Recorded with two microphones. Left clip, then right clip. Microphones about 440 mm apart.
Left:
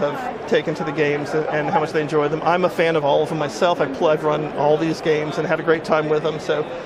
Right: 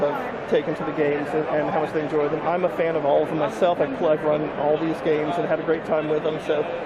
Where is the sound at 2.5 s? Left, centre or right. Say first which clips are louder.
Left 7 dB; left.